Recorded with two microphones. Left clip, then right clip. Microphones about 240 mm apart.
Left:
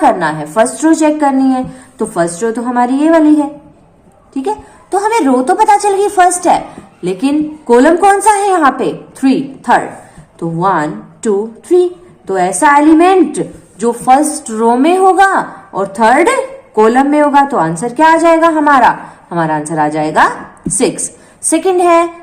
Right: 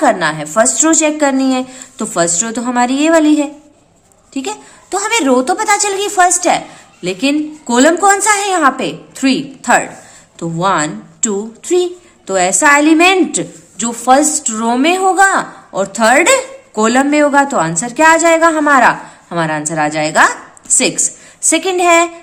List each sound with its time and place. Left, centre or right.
0.0 s a woman's voice: right
10.6 s a woman's voice: right